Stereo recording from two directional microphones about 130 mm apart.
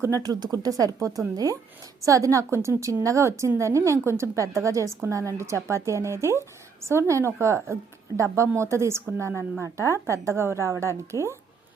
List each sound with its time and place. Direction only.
0.0 s a woman's voice: 25° right (ahead or behind)